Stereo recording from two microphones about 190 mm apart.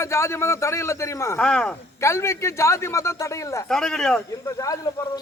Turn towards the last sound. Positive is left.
turn(degrees=15)  # may be behind; listen again after turning